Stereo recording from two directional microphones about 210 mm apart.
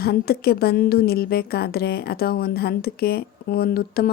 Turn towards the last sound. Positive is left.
turn(degrees=45)  # may be behind; listen again after turning